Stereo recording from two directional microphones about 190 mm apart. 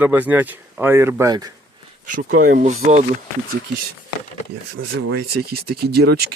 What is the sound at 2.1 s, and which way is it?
Speech, 45° right (ahead or behind).